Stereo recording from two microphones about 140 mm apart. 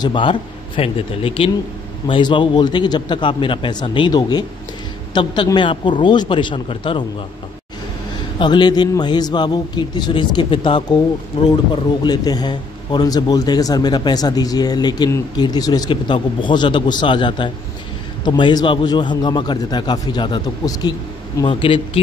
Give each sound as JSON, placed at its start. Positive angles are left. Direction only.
{"t": 0.0, "sound": "a man's voice", "side_deg": 35}
{"t": 8.4, "sound": "a man's voice", "side_deg": 30}